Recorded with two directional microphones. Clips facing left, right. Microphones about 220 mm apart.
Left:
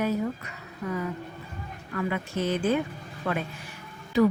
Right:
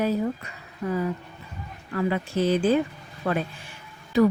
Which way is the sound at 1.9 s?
30° right (ahead or behind).